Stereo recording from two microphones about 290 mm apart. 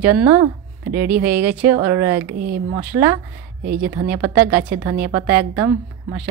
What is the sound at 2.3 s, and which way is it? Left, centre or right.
Speech, right.